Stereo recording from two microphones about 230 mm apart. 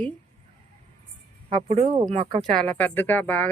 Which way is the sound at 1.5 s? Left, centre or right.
Right.